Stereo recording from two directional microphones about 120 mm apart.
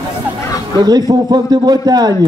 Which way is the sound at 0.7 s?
35° right (ahead or behind).